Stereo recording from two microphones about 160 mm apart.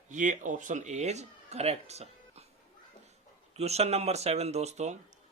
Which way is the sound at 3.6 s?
40° right (ahead or behind).